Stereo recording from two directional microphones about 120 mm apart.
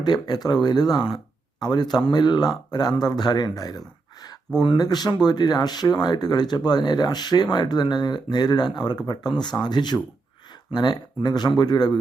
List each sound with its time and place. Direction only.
0.0 s speech: 35° left (ahead or behind)